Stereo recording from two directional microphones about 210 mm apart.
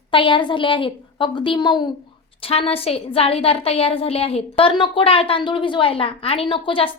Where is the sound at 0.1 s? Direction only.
25° left (ahead or behind).